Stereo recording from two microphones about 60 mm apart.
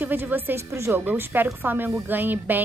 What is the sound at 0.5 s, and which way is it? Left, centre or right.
Speech, right.